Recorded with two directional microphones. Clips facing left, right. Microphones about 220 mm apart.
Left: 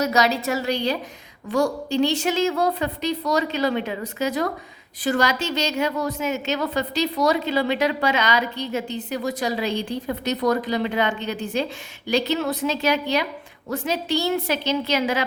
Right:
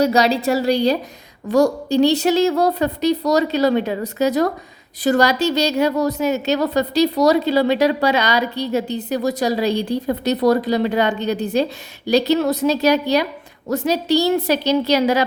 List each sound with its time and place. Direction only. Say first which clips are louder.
0.0 s a woman's voice: right 5 dB; 30° right (ahead or behind)